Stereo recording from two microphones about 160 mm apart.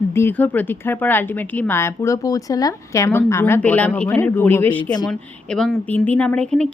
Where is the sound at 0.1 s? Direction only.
15° left (ahead or behind).